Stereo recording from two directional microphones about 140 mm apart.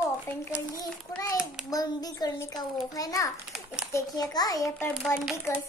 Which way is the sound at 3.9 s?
25° left (ahead or behind).